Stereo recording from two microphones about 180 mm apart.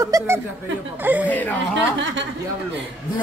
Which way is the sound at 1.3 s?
10° left (ahead or behind).